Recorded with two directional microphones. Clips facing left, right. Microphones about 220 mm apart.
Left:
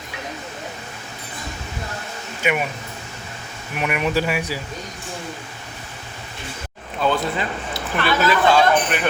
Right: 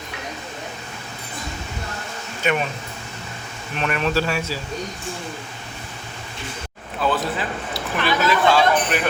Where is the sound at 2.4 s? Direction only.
10° left (ahead or behind).